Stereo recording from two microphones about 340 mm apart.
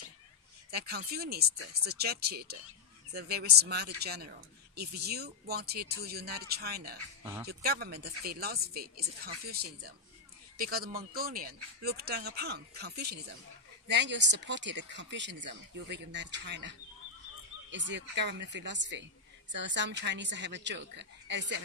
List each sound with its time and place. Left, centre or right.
0.7 s speech: right